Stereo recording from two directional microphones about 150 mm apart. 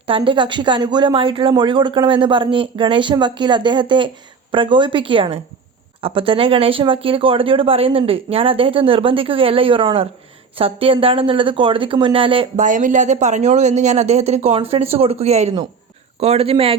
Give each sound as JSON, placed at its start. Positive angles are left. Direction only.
{"t": 0.1, "sound": "speech", "side_deg": -35}
{"t": 12.5, "sound": "speech", "side_deg": -55}